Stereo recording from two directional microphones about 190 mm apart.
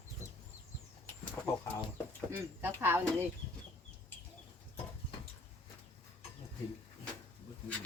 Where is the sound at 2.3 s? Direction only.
10° right (ahead or behind).